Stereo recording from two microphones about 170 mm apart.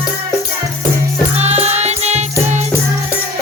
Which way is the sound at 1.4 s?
40° right (ahead or behind).